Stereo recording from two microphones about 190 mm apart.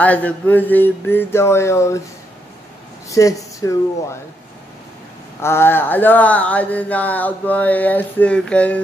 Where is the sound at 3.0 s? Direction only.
15° left (ahead or behind).